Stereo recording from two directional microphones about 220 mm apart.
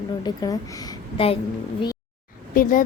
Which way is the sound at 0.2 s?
15° left (ahead or behind).